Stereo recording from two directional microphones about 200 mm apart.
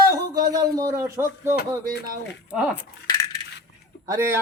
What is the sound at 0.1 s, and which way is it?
Speech, 20° right (ahead or behind).